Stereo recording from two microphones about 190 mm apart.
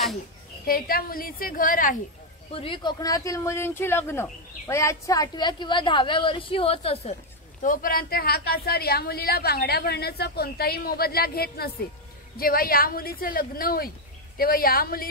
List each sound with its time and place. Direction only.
0.7 s a woman's voice: 50° left (ahead or behind)
2.5 s speech: 25° left (ahead or behind)
7.6 s a woman's voice: 45° left (ahead or behind)